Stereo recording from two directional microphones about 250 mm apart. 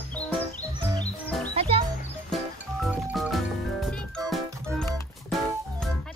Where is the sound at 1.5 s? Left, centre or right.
Right.